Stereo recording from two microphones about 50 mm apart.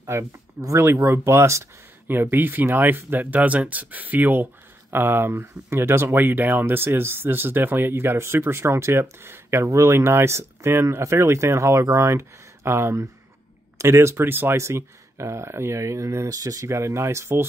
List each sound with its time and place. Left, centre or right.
0.0 s speech: right
0.9 s speech: right
2.0 s speech: right
4.9 s speech: right
6.1 s speech: right
14.6 s speech: right